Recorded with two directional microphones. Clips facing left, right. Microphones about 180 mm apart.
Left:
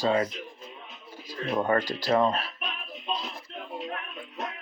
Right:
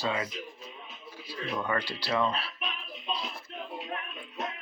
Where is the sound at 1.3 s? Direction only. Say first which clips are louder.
Left 6 dB; 40° left (ahead or behind).